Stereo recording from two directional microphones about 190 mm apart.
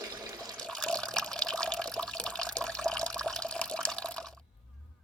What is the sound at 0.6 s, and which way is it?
Water, 5° left (ahead or behind).